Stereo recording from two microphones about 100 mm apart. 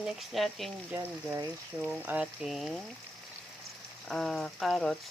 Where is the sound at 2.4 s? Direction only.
Centre (ahead or behind).